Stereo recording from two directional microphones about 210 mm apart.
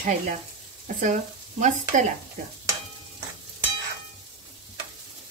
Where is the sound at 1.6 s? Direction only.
35° right (ahead or behind).